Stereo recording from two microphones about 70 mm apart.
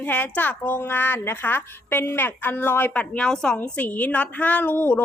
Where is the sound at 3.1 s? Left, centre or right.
Centre.